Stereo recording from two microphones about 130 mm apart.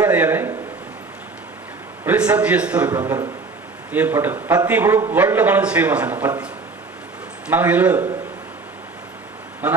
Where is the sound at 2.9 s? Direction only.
20° right (ahead or behind).